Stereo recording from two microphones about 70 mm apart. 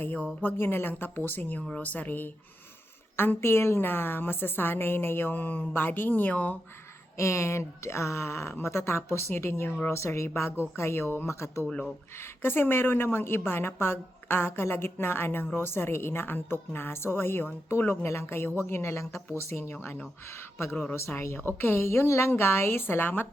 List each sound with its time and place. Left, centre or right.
0.0 s a woman's voice: left
7.2 s a woman's voice: left
20.9 s a woman's voice: left